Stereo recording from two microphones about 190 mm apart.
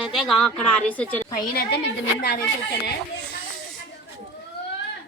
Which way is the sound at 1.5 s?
60° left (ahead or behind).